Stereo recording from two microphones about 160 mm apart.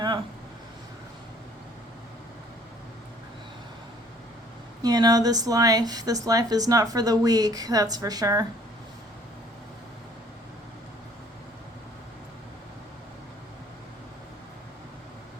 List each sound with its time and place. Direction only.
4.8 s a woman's voice: 25° right (ahead or behind)